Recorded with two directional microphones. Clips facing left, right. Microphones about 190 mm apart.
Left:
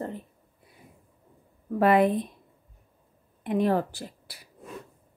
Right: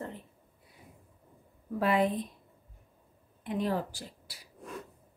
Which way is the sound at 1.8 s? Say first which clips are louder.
Left 7 dB; 60° left (ahead or behind).